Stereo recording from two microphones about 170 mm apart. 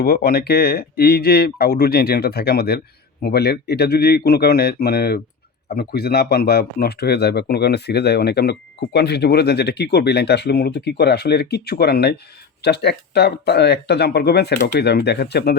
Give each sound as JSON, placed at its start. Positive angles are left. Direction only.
{"t": 0.0, "sound": "speech", "side_deg": 70}